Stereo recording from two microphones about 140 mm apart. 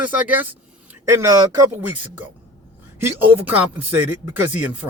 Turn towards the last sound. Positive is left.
turn(degrees=-10)  # may be behind; listen again after turning